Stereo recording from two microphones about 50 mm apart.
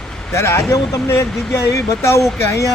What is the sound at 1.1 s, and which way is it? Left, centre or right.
Speech, left.